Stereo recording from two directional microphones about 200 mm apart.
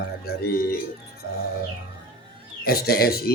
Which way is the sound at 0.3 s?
50° left (ahead or behind).